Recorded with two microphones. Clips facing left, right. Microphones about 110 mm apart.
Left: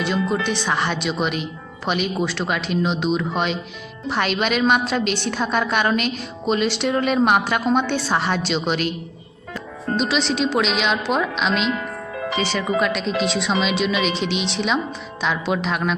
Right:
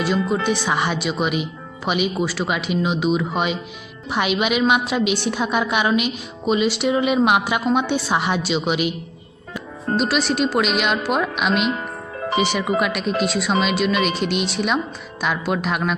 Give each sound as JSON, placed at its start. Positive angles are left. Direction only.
{"t": 0.0, "sound": "a woman's voice", "side_deg": -5}
{"t": 10.0, "sound": "speech", "side_deg": -5}
{"t": 11.7, "sound": "music", "side_deg": -35}
{"t": 12.4, "sound": "a woman's voice", "side_deg": -15}